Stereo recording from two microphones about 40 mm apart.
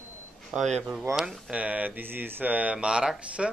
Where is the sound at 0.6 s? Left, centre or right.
Centre.